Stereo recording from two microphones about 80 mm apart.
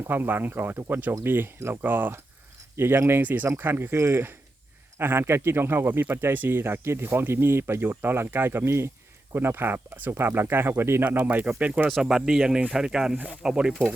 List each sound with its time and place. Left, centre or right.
0.1 s speech: right
11.9 s speech: centre